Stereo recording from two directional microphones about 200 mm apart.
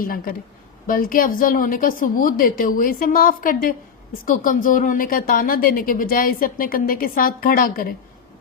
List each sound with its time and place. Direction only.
0.0 s a woman's voice: 45° left (ahead or behind)